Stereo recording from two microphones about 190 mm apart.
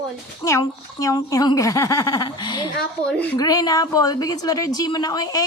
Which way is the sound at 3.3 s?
20° left (ahead or behind).